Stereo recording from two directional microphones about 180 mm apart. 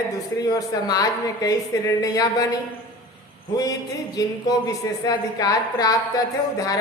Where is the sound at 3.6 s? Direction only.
20° left (ahead or behind).